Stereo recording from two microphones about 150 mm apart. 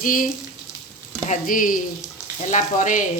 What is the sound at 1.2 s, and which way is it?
Frying, 65° left (ahead or behind).